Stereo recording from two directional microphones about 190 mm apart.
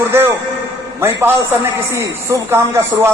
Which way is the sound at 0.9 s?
10° right (ahead or behind).